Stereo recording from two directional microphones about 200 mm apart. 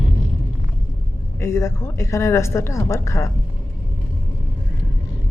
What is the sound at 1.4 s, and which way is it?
A woman's voice, 15° left (ahead or behind).